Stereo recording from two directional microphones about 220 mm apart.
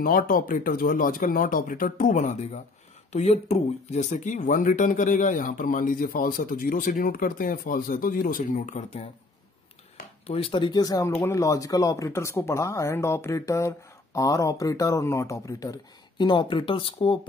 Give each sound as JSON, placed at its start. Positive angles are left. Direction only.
{"t": 0.0, "sound": "speech", "side_deg": 40}
{"t": 10.2, "sound": "speech", "side_deg": 25}